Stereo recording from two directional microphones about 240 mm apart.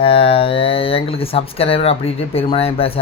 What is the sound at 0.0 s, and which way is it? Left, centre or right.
Speech, left.